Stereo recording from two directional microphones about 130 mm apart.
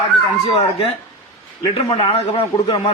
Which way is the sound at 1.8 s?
45° left (ahead or behind).